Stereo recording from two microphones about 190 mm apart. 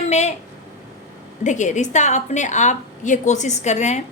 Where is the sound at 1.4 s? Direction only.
40° left (ahead or behind).